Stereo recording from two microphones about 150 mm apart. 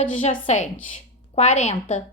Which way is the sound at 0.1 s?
50° left (ahead or behind).